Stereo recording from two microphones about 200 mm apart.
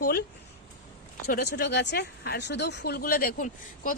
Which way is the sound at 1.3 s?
55° left (ahead or behind).